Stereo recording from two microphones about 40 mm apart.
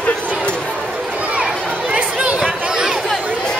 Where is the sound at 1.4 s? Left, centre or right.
Right.